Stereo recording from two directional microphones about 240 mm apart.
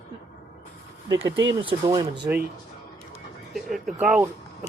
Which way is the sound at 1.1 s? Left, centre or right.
Centre.